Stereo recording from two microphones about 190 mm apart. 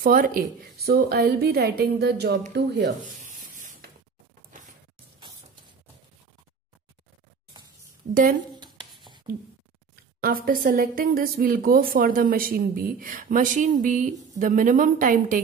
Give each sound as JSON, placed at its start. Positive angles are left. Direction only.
{"t": 0.0, "sound": "a woman's voice", "side_deg": -50}
{"t": 3.2, "sound": "rub", "side_deg": -40}
{"t": 8.1, "sound": "speech", "side_deg": -45}
{"t": 9.3, "sound": "a sound", "side_deg": -25}
{"t": 10.2, "sound": "speech", "side_deg": -50}